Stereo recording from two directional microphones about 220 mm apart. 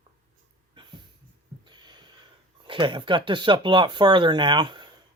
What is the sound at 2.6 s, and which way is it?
Speech, 20° right (ahead or behind).